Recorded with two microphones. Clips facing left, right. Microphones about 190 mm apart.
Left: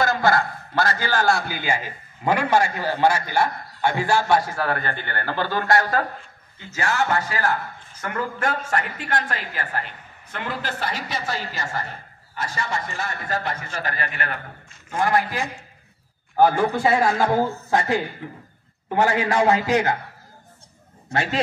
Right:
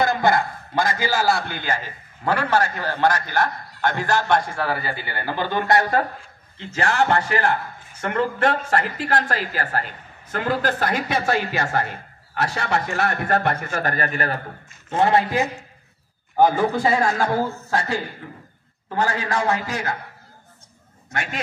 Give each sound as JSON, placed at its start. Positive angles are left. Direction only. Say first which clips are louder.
{"t": 0.0, "sound": "a man's voice", "louder": "right 1 dB", "side_deg": -20}
{"t": 6.8, "sound": "a woman's voice", "louder": "right 3 dB", "side_deg": -35}
{"t": 14.9, "sound": "a man's voice", "louder": "right 3 dB", "side_deg": -25}
{"t": 16.5, "sound": "a man's voice", "louder": "even", "side_deg": 5}
{"t": 17.4, "sound": "a man's voice", "louder": "left 2 dB", "side_deg": 15}
{"t": 21.1, "sound": "speech", "louder": "left 5 dB", "side_deg": 30}